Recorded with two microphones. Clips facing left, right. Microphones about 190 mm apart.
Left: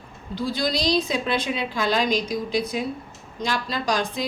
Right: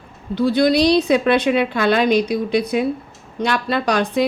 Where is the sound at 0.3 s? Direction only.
65° right (ahead or behind).